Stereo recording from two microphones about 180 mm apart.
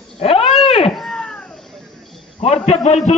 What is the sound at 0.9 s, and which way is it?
Chop, 5° left (ahead or behind).